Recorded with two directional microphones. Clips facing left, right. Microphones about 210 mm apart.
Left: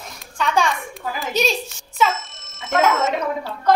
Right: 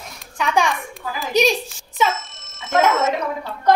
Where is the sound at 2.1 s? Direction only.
Centre (ahead or behind).